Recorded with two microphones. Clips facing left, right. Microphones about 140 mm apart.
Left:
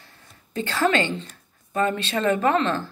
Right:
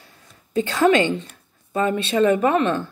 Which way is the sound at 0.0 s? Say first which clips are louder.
Right 1 dB; 15° right (ahead or behind).